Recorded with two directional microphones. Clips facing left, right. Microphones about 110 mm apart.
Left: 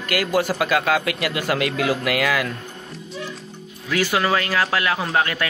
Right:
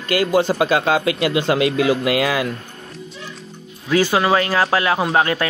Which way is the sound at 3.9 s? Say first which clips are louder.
Right 4 dB; 25° right (ahead or behind).